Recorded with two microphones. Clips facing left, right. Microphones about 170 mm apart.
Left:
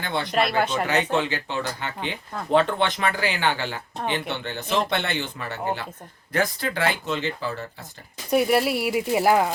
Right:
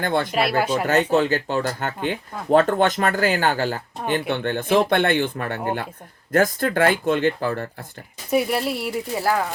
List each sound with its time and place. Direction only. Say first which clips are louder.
0.0 s speech: right 6 dB; 50° right (ahead or behind)
0.3 s speech: right 2 dB; 5° right (ahead or behind)
1.1 s speech: right 5 dB; 45° right (ahead or behind)
4.1 s speech: right 8 dB; 55° right (ahead or behind)
8.3 s speech: left 1 dB; centre (ahead or behind); by 9.5 s 15° left (ahead or behind)